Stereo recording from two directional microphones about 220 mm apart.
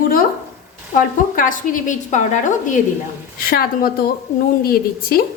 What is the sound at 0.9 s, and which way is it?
A woman's voice, 40° left (ahead or behind).